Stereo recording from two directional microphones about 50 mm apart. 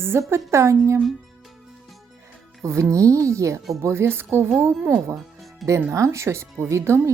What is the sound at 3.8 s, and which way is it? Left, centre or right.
Speech, right.